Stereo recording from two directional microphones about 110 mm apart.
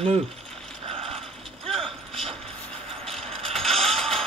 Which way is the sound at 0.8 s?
60° right (ahead or behind).